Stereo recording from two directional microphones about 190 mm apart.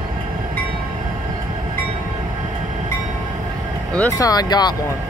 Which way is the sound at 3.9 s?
15° left (ahead or behind).